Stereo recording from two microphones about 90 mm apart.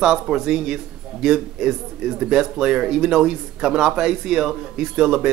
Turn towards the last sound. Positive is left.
turn(degrees=-10)  # may be behind; listen again after turning